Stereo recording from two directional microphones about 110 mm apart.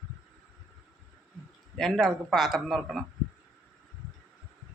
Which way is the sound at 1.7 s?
Centre (ahead or behind).